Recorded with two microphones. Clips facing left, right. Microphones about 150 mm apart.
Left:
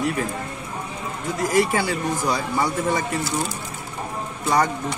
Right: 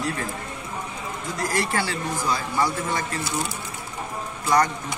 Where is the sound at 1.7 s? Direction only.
15° left (ahead or behind).